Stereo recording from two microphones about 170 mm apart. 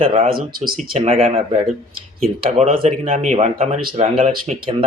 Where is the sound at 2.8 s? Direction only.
35° right (ahead or behind).